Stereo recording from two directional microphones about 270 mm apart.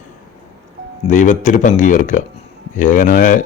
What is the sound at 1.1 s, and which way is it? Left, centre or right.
Speech, left.